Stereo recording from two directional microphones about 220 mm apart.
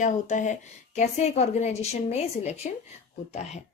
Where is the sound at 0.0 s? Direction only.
35° left (ahead or behind).